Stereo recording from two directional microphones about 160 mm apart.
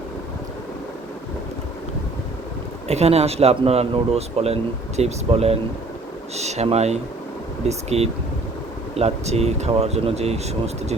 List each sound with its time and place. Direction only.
2.8 s speech: 40° right (ahead or behind)